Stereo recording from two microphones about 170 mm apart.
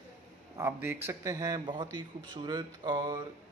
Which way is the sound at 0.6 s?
15° right (ahead or behind).